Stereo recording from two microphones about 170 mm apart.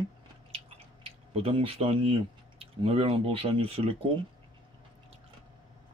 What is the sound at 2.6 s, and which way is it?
Speech, 35° right (ahead or behind).